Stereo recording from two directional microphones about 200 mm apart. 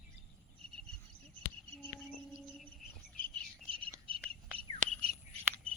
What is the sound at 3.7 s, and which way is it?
Bird, 25° right (ahead or behind).